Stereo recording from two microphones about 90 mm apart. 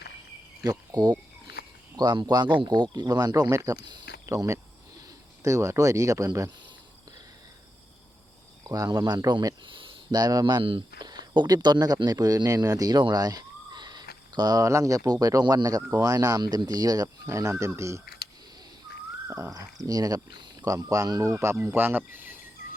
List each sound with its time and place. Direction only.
0.6 s speech: 40° right (ahead or behind)
1.0 s cricket: 55° right (ahead or behind)
2.0 s speech: 50° right (ahead or behind)
3.5 s speech: 35° right (ahead or behind)
8.6 s speech: 45° right (ahead or behind)
9.6 s a sound: 70° right (ahead or behind)
10.1 s speech: 45° right (ahead or behind); by 10.8 s 65° right (ahead or behind)
11.0 s speech: 50° right (ahead or behind); by 18.0 s 35° right (ahead or behind)
19.3 s speech: 35° right (ahead or behind); by 22.4 s 20° right (ahead or behind)